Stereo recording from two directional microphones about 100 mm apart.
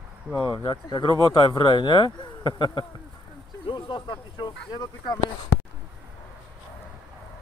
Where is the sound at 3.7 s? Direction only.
55° left (ahead or behind).